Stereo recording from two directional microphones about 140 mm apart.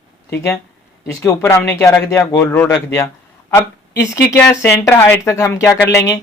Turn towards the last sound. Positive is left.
turn(degrees=20)  # may be behind; listen again after turning